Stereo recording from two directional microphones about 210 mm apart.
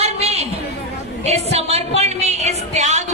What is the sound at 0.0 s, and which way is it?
Chatter, 30° right (ahead or behind).